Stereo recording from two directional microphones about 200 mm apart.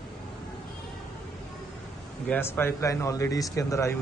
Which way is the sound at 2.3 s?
10° left (ahead or behind).